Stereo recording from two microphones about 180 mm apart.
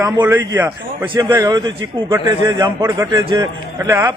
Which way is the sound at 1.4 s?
25° right (ahead or behind).